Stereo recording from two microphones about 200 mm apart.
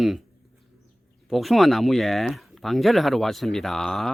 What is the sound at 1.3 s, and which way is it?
Speech, centre (ahead or behind).